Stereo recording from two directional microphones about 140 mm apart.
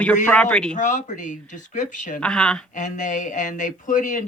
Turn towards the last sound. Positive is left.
turn(degrees=65)  # may be behind; listen again after turning